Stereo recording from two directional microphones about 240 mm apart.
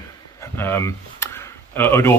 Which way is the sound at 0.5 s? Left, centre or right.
Centre.